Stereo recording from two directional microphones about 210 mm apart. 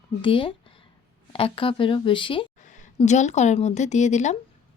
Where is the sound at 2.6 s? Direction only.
35° left (ahead or behind).